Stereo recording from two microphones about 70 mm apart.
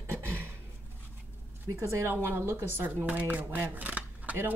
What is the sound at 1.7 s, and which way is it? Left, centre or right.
Speech, right.